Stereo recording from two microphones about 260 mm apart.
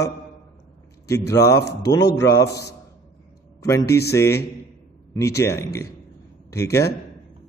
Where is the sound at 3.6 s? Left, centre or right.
Centre.